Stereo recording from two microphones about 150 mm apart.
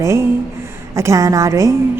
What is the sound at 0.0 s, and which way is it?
A woman's voice, 20° right (ahead or behind).